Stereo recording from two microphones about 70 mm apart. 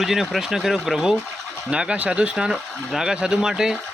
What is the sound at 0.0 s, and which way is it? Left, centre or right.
Speech, centre.